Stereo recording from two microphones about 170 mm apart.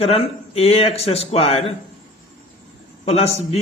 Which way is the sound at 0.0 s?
35° left (ahead or behind).